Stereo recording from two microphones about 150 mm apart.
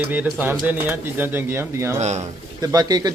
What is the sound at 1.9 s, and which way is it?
Speech, 50° right (ahead or behind).